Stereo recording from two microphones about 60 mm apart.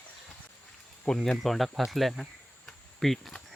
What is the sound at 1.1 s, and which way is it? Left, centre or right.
Speech, centre.